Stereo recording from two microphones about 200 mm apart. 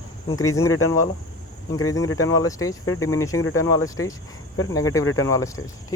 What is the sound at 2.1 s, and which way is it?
Speech, 15° left (ahead or behind).